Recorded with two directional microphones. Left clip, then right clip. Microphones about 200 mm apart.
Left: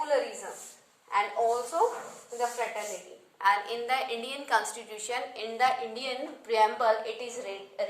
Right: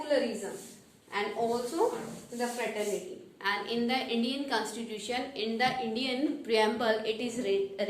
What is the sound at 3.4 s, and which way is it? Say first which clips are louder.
A woman's voice: left 5 dB; 30° left (ahead or behind).